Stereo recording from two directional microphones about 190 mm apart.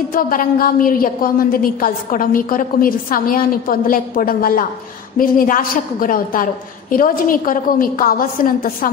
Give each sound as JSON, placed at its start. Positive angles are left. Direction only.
{"t": 0.1, "sound": "a woman's voice", "side_deg": 50}